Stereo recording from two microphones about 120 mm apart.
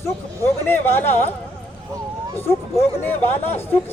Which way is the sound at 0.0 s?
20° left (ahead or behind).